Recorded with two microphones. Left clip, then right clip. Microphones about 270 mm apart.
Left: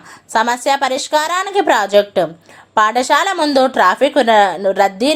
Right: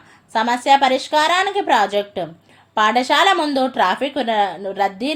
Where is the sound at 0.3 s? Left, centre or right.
Centre.